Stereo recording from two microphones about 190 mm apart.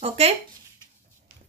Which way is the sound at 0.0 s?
30° right (ahead or behind).